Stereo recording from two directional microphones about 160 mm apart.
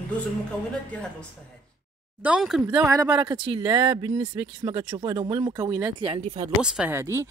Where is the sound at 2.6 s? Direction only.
15° right (ahead or behind).